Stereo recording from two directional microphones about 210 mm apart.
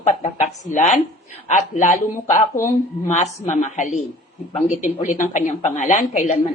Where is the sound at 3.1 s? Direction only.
35° left (ahead or behind).